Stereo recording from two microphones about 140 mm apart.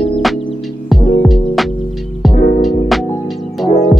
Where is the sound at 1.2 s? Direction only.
Centre (ahead or behind).